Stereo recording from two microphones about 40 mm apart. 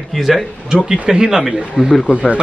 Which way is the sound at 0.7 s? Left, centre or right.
Centre.